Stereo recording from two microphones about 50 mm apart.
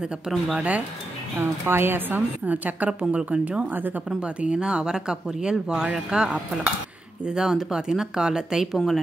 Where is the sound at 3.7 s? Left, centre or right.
Right.